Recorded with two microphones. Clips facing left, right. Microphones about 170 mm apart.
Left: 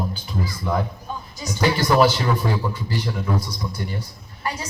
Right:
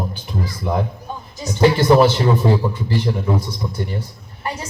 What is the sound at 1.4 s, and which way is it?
A woman's voice, 25° right (ahead or behind).